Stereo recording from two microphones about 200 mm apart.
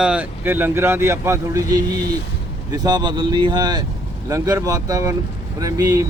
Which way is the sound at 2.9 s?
20° right (ahead or behind).